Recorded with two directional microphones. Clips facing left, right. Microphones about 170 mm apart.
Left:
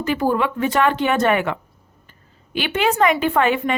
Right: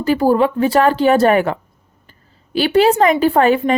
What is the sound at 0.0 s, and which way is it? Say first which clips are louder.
A woman's voice: right 6 dB; 35° right (ahead or behind).